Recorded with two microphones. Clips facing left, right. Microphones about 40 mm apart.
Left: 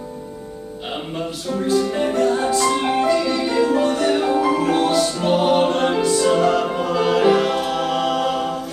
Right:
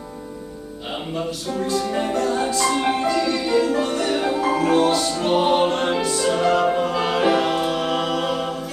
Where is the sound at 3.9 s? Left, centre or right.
Centre.